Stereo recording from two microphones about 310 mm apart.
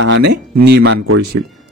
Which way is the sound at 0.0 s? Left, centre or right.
Right.